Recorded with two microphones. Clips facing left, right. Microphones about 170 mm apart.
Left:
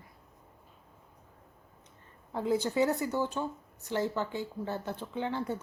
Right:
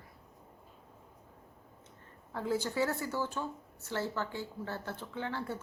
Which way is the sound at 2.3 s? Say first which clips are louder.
Left 4 dB; 20° left (ahead or behind).